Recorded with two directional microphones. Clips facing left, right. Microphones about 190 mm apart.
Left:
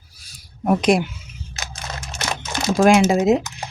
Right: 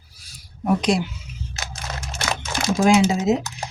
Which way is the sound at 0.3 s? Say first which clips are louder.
Left 2 dB; 50° left (ahead or behind).